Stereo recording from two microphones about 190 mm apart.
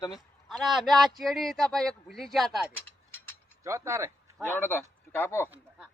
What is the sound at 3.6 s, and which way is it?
Speech, 15° right (ahead or behind).